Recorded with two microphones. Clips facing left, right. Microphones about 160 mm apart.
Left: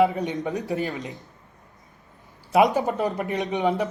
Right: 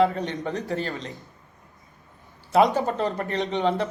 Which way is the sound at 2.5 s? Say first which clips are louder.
Even; 15° left (ahead or behind).